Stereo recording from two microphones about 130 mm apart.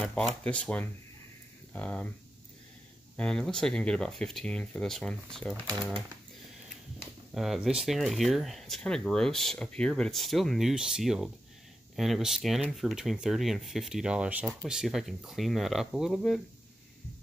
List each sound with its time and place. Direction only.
0.0 s a sound: 5° left (ahead or behind)
0.4 s speech: 10° left (ahead or behind)
3.2 s speech: 5° left (ahead or behind)
7.3 s speech: centre (ahead or behind)